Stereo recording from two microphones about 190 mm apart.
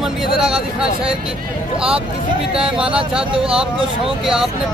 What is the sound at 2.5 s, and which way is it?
Speech, 5° right (ahead or behind).